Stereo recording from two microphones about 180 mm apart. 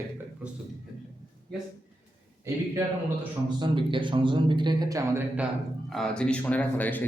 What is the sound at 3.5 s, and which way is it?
Speech, 25° right (ahead or behind).